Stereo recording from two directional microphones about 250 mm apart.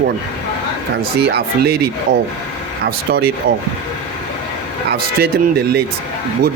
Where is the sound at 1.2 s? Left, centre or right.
Right.